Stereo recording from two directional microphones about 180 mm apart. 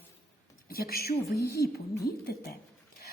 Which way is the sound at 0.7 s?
55° left (ahead or behind).